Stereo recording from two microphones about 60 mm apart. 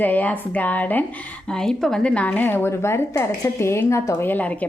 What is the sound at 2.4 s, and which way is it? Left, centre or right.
Speech, left.